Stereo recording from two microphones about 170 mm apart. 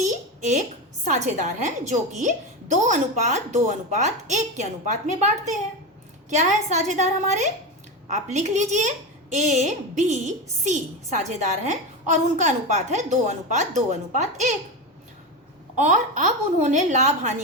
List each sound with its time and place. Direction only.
0.0 s a sound: 45° right (ahead or behind)
1.0 s a woman's voice: 45° right (ahead or behind)
6.3 s a woman's voice: 45° right (ahead or behind)
15.7 s a woman's voice: 45° right (ahead or behind)